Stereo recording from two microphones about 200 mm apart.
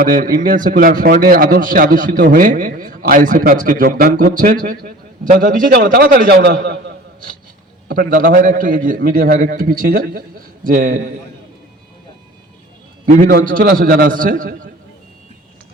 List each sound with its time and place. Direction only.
0.0 s a man's voice: 45° right (ahead or behind)
13.1 s a man's voice: 40° right (ahead or behind)